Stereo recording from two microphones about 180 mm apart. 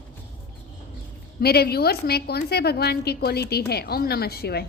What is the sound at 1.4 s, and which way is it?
A woman's voice, 60° left (ahead or behind).